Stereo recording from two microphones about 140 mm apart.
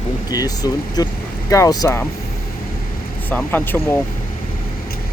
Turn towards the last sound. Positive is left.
turn(degrees=15)  # may be behind; listen again after turning